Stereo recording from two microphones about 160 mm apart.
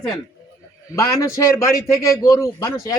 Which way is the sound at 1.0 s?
20° left (ahead or behind).